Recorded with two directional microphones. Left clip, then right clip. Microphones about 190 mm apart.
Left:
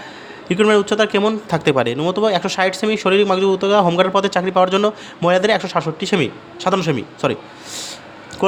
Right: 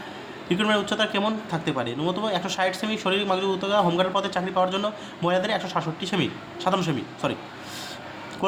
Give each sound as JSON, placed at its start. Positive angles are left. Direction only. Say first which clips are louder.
{"t": 0.4, "sound": "speech", "louder": "left 9 dB", "side_deg": 30}
{"t": 1.5, "sound": "speech", "louder": "left 11 dB", "side_deg": 45}